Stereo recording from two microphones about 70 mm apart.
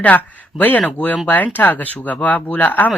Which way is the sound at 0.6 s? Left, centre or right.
Left.